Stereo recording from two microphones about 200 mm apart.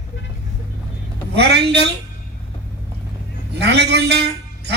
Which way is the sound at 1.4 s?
55° right (ahead or behind).